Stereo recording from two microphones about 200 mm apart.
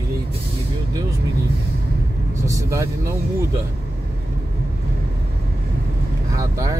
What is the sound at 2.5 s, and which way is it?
Speech, 15° right (ahead or behind).